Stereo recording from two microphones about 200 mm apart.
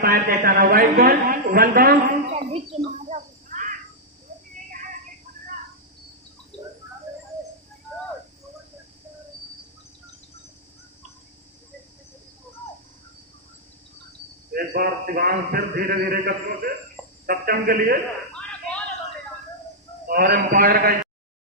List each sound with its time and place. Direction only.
0.0 s a man's voice: 45° right (ahead or behind)
2.3 s a sound: 30° right (ahead or behind)
14.5 s a man's voice: 50° right (ahead or behind)
20.1 s a man's voice: 45° right (ahead or behind)